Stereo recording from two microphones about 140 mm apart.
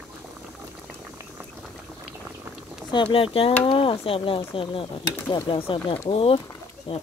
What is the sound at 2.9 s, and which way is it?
Speech, 35° left (ahead or behind).